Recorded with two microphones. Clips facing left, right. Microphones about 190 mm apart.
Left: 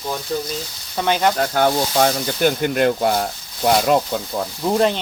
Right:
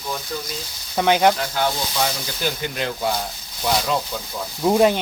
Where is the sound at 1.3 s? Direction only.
50° left (ahead or behind).